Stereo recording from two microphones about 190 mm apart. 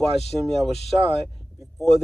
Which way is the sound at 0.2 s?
Centre (ahead or behind).